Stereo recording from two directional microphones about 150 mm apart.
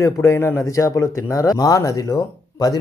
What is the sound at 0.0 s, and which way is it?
A man's voice, 20° left (ahead or behind).